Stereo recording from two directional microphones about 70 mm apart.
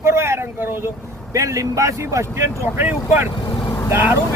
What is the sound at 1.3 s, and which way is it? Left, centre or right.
Speech, right.